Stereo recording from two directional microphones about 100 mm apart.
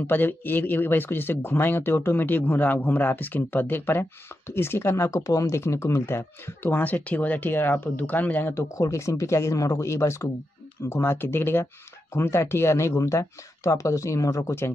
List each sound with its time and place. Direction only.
0.0 s speech: 20° left (ahead or behind)
8.7 s speech: 30° left (ahead or behind)